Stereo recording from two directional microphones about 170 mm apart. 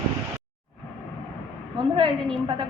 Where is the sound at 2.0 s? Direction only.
30° right (ahead or behind).